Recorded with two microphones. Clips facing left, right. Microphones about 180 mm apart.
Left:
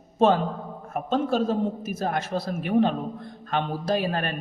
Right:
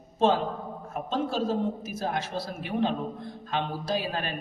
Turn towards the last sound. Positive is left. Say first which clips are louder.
# left 4 dB
turn(degrees=55)  # may be behind; listen again after turning